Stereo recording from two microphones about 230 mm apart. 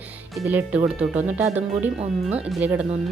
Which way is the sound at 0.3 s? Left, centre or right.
Centre.